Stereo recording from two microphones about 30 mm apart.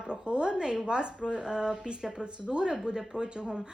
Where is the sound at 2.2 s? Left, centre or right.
Right.